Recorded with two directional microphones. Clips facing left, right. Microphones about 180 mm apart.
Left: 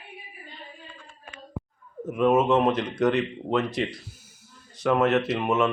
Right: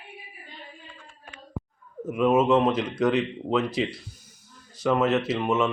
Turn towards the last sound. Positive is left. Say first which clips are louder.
# even
turn(degrees=0)  # may be behind; listen again after turning